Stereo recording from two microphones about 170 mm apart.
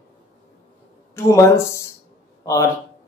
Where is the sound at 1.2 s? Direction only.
15° left (ahead or behind).